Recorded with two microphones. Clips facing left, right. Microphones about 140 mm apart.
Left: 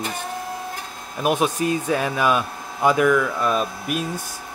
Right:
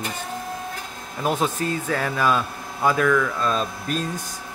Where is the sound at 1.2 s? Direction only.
15° left (ahead or behind).